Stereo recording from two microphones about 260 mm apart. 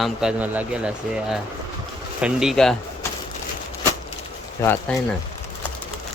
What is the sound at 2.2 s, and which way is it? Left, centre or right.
Speech, centre.